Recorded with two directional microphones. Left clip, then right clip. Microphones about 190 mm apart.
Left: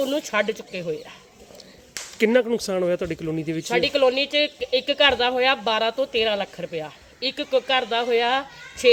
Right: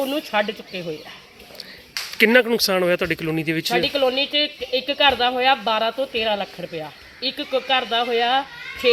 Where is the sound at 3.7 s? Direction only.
25° left (ahead or behind).